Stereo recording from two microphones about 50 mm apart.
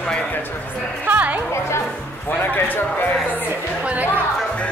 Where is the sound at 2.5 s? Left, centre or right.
Left.